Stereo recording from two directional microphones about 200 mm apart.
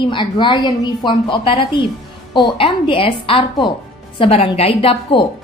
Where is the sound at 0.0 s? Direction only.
25° left (ahead or behind).